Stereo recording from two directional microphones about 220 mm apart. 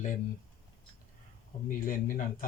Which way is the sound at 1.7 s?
40° left (ahead or behind).